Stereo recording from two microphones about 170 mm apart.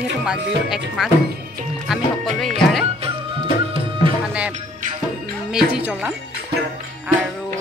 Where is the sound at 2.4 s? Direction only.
Centre (ahead or behind).